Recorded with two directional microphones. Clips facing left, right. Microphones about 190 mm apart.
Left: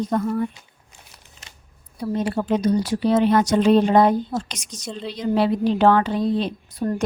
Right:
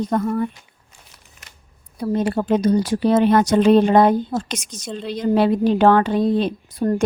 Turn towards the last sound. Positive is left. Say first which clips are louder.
# right 4 dB
turn(degrees=-50)  # may be behind; listen again after turning